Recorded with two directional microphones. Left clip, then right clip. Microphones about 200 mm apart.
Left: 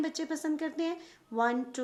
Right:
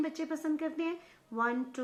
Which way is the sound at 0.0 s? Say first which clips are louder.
Left 1 dB; 40° left (ahead or behind).